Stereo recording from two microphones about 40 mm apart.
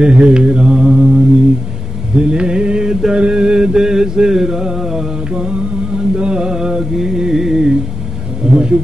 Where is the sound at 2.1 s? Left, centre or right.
Right.